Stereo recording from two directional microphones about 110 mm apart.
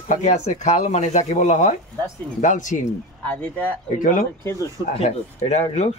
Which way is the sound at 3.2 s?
15° left (ahead or behind).